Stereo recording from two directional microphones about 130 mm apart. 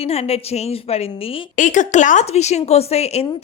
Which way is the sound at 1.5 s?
75° left (ahead or behind).